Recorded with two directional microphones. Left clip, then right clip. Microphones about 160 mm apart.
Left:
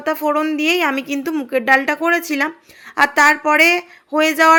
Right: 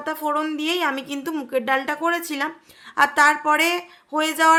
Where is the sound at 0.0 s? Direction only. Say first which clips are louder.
Left 6 dB; 15° left (ahead or behind).